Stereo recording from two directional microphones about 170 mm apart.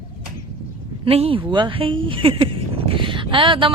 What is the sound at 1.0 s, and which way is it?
Speech, 35° right (ahead or behind).